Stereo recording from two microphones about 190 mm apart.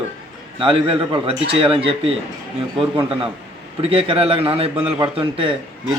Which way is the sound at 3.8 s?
30° right (ahead or behind).